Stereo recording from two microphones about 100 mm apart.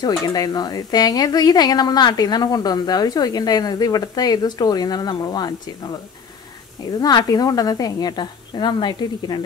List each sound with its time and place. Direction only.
0.0 s speech: 40° left (ahead or behind)
7.0 s a woman's voice: 40° left (ahead or behind)